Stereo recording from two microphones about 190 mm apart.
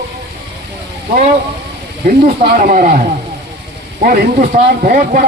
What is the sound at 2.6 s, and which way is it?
Speech, 45° right (ahead or behind).